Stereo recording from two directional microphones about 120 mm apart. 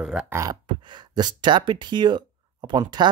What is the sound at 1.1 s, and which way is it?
Speech, 40° right (ahead or behind).